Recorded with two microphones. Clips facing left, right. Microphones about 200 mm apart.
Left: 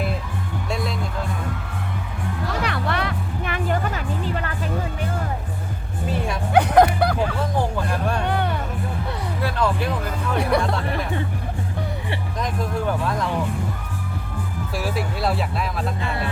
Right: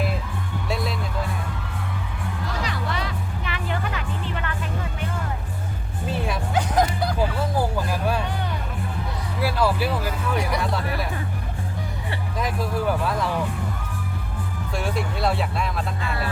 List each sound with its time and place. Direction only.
2.6 s music: 60° left (ahead or behind); by 4.5 s 40° left (ahead or behind)
6.1 s bow-wow: centre (ahead or behind)
6.5 s music: 60° left (ahead or behind)
7.5 s a sound: 5° right (ahead or behind)
8.2 s music: 60° left (ahead or behind)
9.4 s a sound: 5° right (ahead or behind)
10.3 s music: 60° left (ahead or behind)
12.4 s vehicle: 5° right (ahead or behind)
14.8 s a sound: 5° left (ahead or behind)